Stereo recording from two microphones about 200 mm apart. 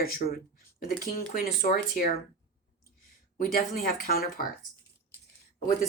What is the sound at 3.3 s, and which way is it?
Speech, 45° left (ahead or behind).